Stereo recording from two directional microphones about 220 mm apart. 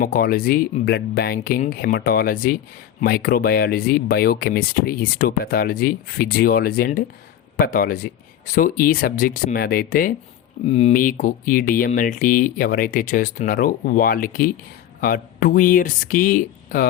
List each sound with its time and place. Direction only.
0.0 s speech: 40° left (ahead or behind)
10.7 s speech: 30° left (ahead or behind)